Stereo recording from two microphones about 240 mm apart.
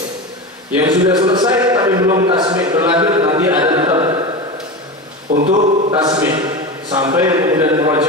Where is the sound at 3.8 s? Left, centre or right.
Right.